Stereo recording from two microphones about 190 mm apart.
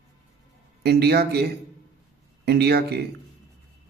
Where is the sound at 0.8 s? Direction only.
60° right (ahead or behind).